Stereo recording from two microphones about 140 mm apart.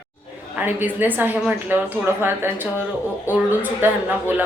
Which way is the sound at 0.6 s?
15° right (ahead or behind).